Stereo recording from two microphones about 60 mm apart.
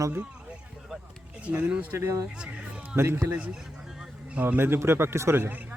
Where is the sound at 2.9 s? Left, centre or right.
Right.